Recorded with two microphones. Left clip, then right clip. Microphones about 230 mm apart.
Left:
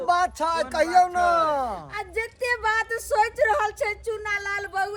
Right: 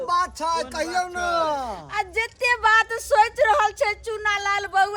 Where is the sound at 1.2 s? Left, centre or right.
Centre.